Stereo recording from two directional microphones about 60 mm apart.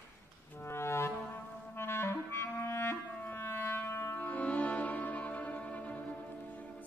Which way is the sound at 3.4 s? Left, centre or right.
Left.